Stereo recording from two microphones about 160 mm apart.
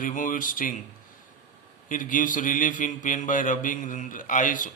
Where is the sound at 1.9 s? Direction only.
55° left (ahead or behind).